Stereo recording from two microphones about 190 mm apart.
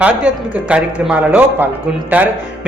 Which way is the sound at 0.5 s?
5° right (ahead or behind).